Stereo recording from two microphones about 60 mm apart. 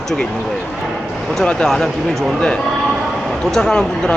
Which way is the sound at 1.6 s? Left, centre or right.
Centre.